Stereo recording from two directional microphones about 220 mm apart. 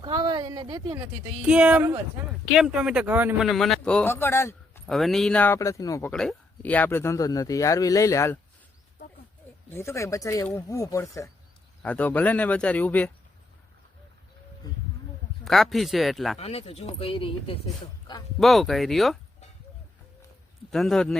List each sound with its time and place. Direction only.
0.0 s a sound: 20° right (ahead or behind)
1.5 s speech: 5° right (ahead or behind); by 4.8 s 10° left (ahead or behind)
4.9 s a man's voice: centre (ahead or behind)
9.6 s a man's voice: 10° left (ahead or behind)
15.4 s speech: centre (ahead or behind)
16.4 s speech: 30° left (ahead or behind)
18.3 s speech: centre (ahead or behind)
20.7 s speech: centre (ahead or behind)